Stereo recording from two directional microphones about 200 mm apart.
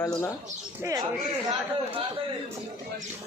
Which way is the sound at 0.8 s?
15° right (ahead or behind).